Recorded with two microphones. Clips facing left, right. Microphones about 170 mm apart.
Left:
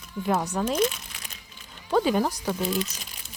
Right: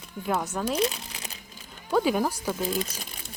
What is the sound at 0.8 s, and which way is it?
Crumpling, 35° right (ahead or behind).